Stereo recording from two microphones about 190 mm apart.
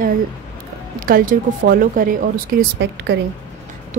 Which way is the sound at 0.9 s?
45° right (ahead or behind).